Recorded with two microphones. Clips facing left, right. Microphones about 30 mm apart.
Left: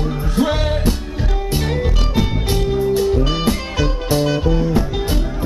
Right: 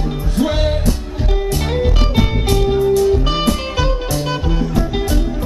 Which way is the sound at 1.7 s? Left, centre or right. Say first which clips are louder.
Right 3 dB; centre.